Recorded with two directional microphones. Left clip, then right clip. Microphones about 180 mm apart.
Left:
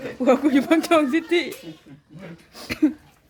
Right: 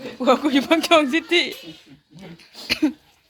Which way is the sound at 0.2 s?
15° left (ahead or behind).